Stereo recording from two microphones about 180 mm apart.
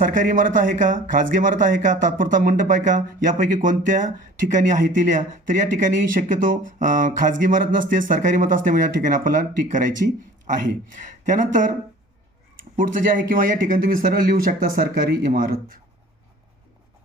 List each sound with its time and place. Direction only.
0.0 s speech: 50° right (ahead or behind)
12.7 s speech: 50° right (ahead or behind)